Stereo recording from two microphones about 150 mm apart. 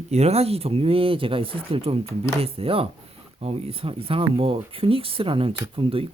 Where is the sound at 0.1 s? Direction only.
45° right (ahead or behind).